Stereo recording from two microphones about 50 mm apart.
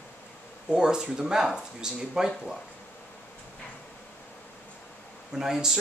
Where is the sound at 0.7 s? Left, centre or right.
Centre.